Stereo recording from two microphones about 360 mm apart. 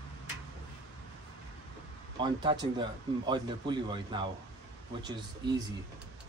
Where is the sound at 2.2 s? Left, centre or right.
Centre.